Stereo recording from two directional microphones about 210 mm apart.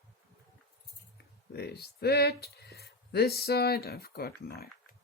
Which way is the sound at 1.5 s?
50° left (ahead or behind).